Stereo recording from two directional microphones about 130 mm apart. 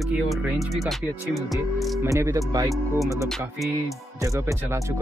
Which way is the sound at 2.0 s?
20° right (ahead or behind).